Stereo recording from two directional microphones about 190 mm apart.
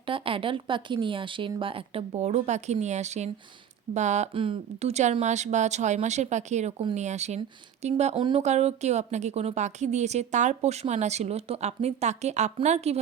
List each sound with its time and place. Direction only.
0.0 s speech: 30° right (ahead or behind)